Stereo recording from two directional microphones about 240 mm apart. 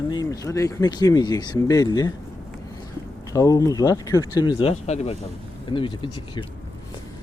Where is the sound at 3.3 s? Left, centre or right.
Centre.